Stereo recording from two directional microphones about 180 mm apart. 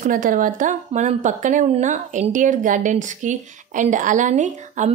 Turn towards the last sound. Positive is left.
turn(degrees=-40)  # may be behind; listen again after turning